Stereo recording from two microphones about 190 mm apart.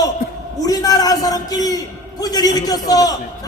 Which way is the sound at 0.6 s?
20° left (ahead or behind).